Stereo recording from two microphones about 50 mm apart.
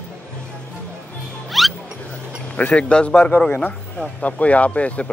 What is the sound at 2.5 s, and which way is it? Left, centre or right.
Speech, left.